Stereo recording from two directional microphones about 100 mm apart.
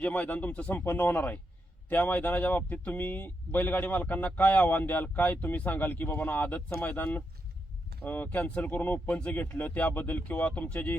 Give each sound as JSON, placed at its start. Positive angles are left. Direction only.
{"t": 0.0, "sound": "speech", "side_deg": 15}